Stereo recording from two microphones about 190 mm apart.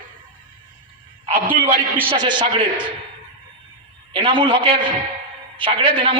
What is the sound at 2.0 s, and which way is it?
Speech, 25° right (ahead or behind).